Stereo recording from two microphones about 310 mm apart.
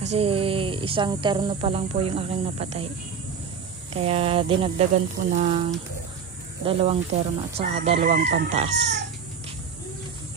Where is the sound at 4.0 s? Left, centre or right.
Centre.